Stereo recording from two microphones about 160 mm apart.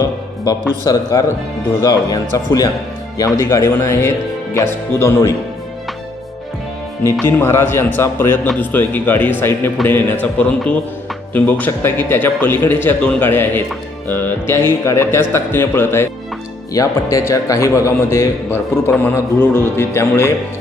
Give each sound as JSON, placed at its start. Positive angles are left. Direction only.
{"t": 0.9, "sound": "a man's voice", "side_deg": 20}
{"t": 7.0, "sound": "a man's voice", "side_deg": 15}